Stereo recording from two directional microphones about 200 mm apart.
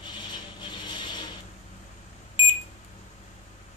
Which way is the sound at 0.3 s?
20° left (ahead or behind).